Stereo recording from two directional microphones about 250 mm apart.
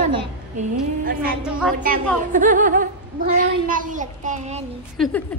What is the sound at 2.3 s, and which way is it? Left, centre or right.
A child's voice, right.